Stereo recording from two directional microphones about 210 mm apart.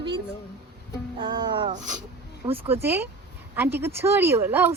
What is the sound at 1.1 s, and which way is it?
Music, 20° right (ahead or behind).